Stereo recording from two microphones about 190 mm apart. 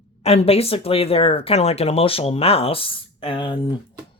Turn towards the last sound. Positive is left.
turn(degrees=25)  # may be behind; listen again after turning